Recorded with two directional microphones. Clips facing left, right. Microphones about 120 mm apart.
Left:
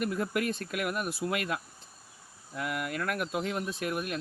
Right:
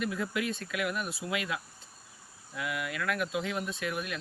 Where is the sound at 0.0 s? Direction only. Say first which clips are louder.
Left 2 dB; 50° left (ahead or behind).